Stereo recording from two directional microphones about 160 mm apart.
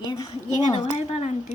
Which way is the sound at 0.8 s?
45° left (ahead or behind).